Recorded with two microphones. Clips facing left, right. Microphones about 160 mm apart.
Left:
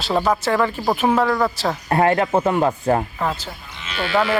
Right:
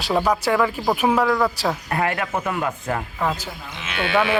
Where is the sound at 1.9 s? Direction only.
30° left (ahead or behind).